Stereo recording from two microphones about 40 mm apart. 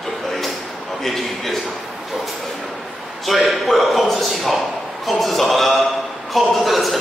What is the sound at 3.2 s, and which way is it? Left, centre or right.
A man's voice, centre.